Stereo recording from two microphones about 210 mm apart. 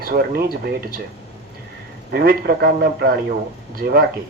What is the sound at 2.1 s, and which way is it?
A man's voice, 50° right (ahead or behind).